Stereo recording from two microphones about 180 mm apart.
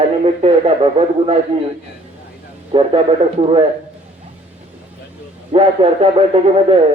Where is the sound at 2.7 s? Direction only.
30° right (ahead or behind).